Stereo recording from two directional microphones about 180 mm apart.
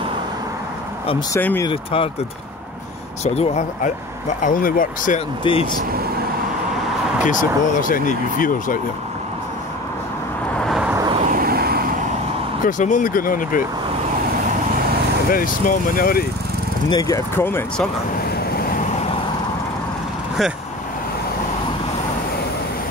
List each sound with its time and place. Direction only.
1.3 s speech: 15° left (ahead or behind)
1.7 s speech: 30° left (ahead or behind)
3.3 s speech: 40° left (ahead or behind)
5.4 s speech: 30° left (ahead or behind)
7.2 s speech: 45° left (ahead or behind)
10.6 s vehicle: centre (ahead or behind)
11.2 s vehicle: 55° right (ahead or behind)
12.6 s speech: 45° left (ahead or behind)
15.3 s speech: 50° left (ahead or behind)
16.9 s speech: 20° left (ahead or behind)